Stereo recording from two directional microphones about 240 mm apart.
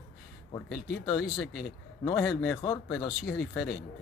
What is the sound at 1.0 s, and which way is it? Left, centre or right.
Speech, centre.